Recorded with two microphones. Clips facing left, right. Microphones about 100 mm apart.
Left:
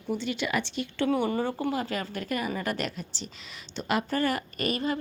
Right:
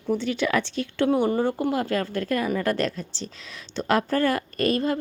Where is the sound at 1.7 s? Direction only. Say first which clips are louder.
Right 6 dB; 65° right (ahead or behind); by 2.7 s 90° right.